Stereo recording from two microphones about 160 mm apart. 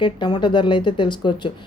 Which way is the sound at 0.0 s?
30° left (ahead or behind).